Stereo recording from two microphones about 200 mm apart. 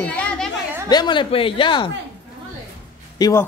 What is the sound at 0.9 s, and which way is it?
Speech, 20° left (ahead or behind).